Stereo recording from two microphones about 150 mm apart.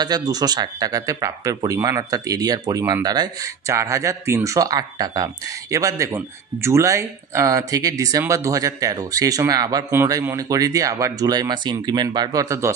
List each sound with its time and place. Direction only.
0.0 s speech: 25° right (ahead or behind)